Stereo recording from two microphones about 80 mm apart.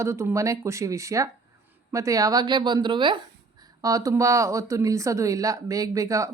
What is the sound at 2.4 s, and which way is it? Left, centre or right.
Speech, right.